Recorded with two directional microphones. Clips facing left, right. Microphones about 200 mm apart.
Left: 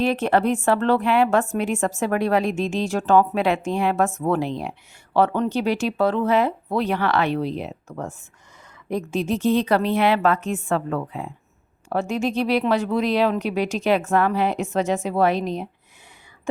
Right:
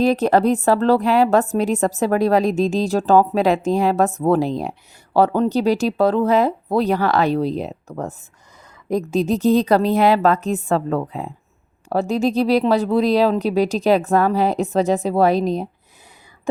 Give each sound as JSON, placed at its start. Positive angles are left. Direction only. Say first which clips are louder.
{"t": 0.0, "sound": "speech", "louder": "right 4 dB", "side_deg": -40}